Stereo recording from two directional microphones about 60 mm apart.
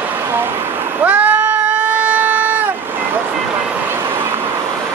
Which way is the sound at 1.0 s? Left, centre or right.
Right.